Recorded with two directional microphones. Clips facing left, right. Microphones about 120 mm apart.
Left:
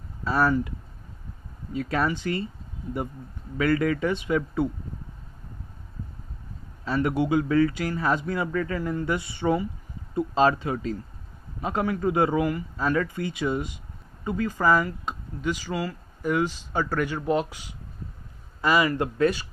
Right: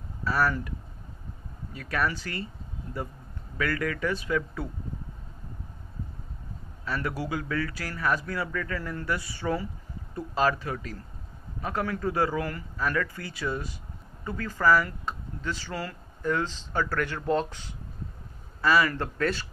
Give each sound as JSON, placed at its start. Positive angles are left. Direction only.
{"t": 0.2, "sound": "speech", "side_deg": 25}
{"t": 3.5, "sound": "speech", "side_deg": 25}
{"t": 6.8, "sound": "speech", "side_deg": 25}